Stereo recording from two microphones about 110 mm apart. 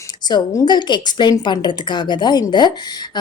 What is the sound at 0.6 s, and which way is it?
A woman's voice, 45° left (ahead or behind).